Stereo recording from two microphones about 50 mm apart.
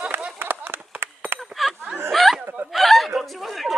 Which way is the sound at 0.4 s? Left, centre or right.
Right.